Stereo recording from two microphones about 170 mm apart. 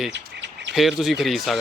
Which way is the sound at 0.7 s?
Centre (ahead or behind).